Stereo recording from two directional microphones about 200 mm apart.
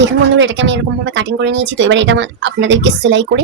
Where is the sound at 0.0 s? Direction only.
65° right (ahead or behind).